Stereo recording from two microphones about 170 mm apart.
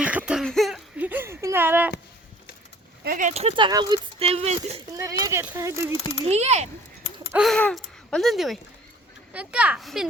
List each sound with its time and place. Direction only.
0.0 s cough: 10° right (ahead or behind)
0.4 s a sound: centre (ahead or behind)
0.9 s a sound: 10° right (ahead or behind)
3.0 s speech: 55° right (ahead or behind)
4.9 s speech: 20° right (ahead or behind)
6.2 s speech: 40° right (ahead or behind)
7.3 s speech: centre (ahead or behind)